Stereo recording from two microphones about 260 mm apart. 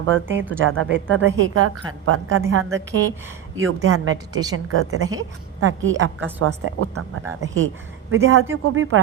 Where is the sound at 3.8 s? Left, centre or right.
Right.